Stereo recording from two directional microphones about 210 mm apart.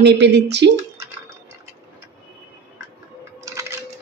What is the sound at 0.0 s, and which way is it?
Speech, 55° right (ahead or behind).